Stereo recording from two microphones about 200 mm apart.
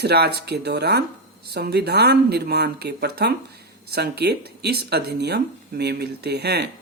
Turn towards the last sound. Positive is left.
turn(degrees=-55)  # may be behind; listen again after turning